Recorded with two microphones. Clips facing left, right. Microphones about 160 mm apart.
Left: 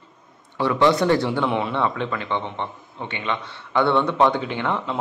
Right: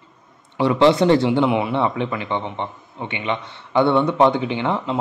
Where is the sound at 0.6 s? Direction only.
20° right (ahead or behind).